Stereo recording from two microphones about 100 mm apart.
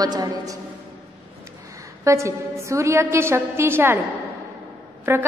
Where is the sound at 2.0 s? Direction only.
30° right (ahead or behind).